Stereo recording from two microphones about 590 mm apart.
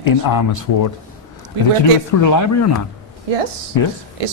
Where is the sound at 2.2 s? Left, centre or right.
Left.